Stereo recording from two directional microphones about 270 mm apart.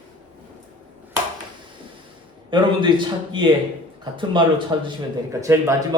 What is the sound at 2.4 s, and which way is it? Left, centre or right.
Speech, centre.